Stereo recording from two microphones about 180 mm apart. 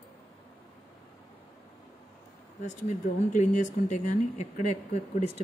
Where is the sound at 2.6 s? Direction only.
40° left (ahead or behind).